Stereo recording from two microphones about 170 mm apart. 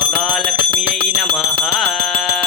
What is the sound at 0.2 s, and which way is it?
Music, centre (ahead or behind).